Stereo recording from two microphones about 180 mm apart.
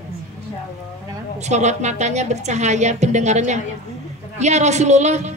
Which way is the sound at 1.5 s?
40° right (ahead or behind).